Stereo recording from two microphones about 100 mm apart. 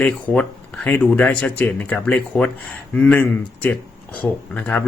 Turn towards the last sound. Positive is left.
turn(degrees=15)  # may be behind; listen again after turning